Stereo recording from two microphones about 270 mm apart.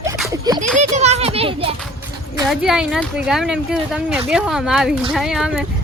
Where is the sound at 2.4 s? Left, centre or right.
Centre.